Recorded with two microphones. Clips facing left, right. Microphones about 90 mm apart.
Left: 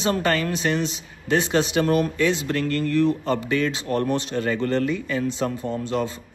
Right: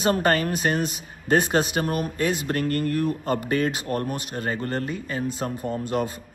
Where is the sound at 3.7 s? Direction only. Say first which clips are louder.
Left 4 dB; 30° left (ahead or behind).